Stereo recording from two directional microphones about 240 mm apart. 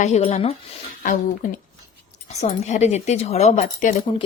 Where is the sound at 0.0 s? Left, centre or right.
Left.